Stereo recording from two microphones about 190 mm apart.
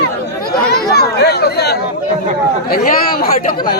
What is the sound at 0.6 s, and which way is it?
Chatter, 55° left (ahead or behind).